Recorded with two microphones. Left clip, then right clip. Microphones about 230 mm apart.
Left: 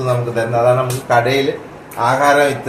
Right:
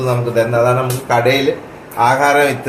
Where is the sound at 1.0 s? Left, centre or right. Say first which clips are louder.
Right 1 dB; right.